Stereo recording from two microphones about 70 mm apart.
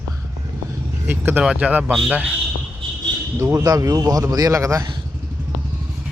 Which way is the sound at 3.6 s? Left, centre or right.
Right.